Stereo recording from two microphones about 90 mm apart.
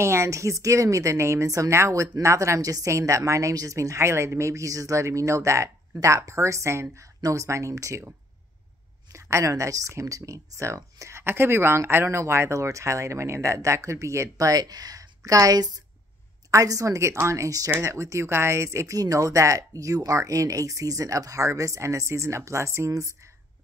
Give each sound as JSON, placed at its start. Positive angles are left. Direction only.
{"t": 0.0, "sound": "a woman's voice", "side_deg": -30}
{"t": 9.1, "sound": "a woman's voice", "side_deg": -35}